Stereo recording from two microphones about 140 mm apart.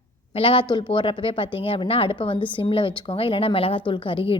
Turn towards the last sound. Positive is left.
turn(degrees=40)  # may be behind; listen again after turning